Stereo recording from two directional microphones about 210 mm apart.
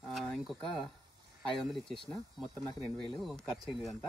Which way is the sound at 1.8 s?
25° left (ahead or behind).